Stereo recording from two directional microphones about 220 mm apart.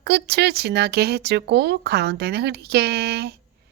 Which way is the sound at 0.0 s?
50° right (ahead or behind).